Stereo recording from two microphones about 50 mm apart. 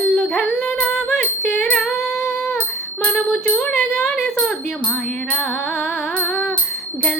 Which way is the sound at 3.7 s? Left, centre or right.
Centre.